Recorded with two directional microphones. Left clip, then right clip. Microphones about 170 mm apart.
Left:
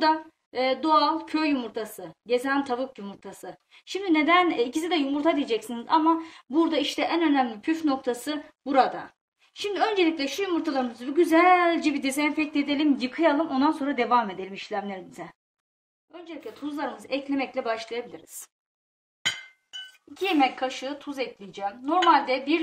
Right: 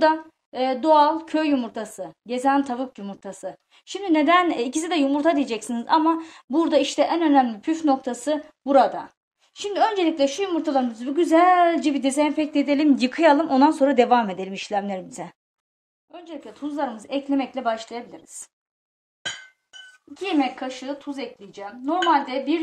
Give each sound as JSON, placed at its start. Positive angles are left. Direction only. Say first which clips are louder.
{"t": 0.0, "sound": "a woman's voice", "louder": "right 4 dB", "side_deg": -35}
{"t": 16.1, "sound": "a woman's voice", "louder": "right 2 dB", "side_deg": -40}
{"t": 20.2, "sound": "a woman's voice", "louder": "left 1 dB", "side_deg": -25}